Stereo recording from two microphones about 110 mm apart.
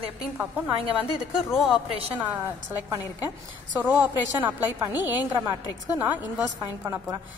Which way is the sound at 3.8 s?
15° right (ahead or behind).